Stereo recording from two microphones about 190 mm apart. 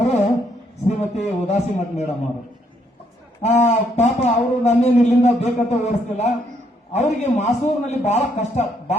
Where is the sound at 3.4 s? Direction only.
35° left (ahead or behind).